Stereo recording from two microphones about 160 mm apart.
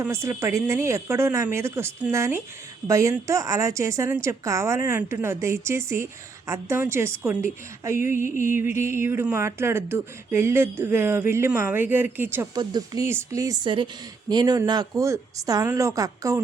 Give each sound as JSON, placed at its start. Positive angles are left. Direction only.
{"t": 0.0, "sound": "speech", "side_deg": -15}
{"t": 12.5, "sound": "a woman's voice", "side_deg": -25}